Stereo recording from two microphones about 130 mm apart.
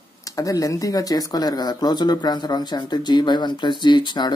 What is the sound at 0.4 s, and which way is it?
Speech, 25° left (ahead or behind).